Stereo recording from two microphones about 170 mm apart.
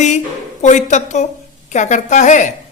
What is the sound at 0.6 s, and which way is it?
Speech, 45° left (ahead or behind).